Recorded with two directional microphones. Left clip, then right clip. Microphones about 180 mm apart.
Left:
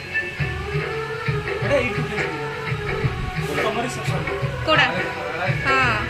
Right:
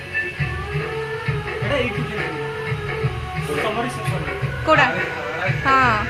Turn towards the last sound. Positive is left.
turn(degrees=-25)  # may be behind; listen again after turning